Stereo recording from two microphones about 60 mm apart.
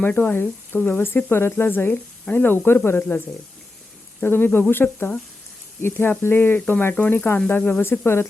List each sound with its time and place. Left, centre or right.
0.0 s speech: left
4.2 s speech: left